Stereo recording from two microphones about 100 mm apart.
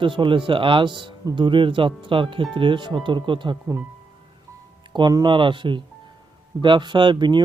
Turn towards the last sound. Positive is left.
turn(degrees=-50)  # may be behind; listen again after turning